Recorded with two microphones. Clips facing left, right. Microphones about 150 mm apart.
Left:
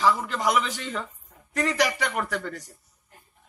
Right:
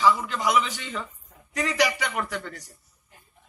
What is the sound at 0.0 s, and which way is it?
Speech, 40° left (ahead or behind).